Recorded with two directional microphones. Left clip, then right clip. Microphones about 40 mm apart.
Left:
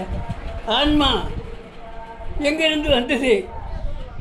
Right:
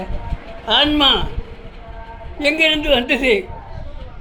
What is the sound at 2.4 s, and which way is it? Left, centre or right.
A woman's voice, right.